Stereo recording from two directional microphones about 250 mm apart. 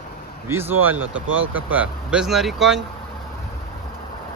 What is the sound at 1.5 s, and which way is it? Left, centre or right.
Speech, centre.